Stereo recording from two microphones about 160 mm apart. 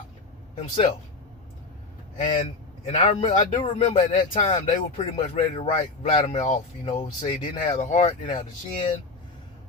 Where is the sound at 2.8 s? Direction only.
40° left (ahead or behind).